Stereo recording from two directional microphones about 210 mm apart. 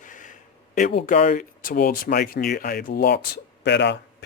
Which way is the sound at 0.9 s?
35° left (ahead or behind).